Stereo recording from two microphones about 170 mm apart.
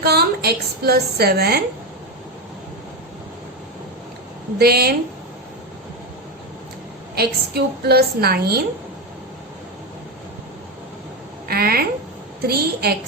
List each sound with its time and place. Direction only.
0.0 s a woman's voice: 70° right (ahead or behind)
4.5 s a woman's voice: 65° right (ahead or behind)
7.2 s a woman's voice: 70° right (ahead or behind)
11.4 s a woman's voice: 65° right (ahead or behind)